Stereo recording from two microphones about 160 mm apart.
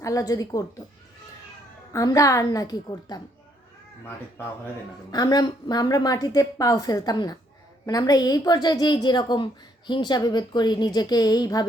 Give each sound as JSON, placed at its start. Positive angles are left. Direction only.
{"t": 0.0, "sound": "a woman's voice", "side_deg": 20}
{"t": 1.9, "sound": "a woman's voice", "side_deg": 20}
{"t": 5.1, "sound": "a woman's voice", "side_deg": 25}